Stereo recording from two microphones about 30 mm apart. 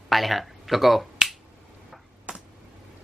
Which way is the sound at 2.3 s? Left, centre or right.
Right.